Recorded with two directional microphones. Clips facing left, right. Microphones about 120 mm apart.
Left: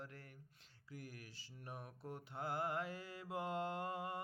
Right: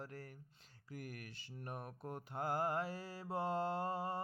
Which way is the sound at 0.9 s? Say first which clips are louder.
Right 4 dB; 55° right (ahead or behind).